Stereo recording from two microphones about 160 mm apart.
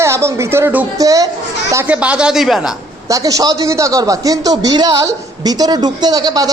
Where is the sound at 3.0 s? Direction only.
20° right (ahead or behind).